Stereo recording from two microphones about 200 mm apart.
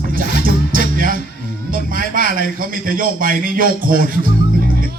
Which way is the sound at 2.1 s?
45° right (ahead or behind).